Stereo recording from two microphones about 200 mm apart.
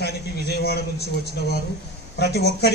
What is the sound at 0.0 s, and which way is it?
A man's voice, 55° left (ahead or behind).